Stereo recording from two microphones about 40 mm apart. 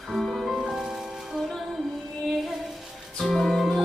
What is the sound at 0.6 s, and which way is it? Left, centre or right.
Music, centre.